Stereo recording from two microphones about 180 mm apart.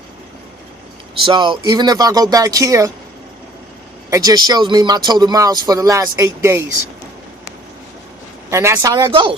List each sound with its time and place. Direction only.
1.2 s speech: 25° right (ahead or behind)
4.1 s speech: 20° right (ahead or behind)
8.4 s speech: 15° right (ahead or behind)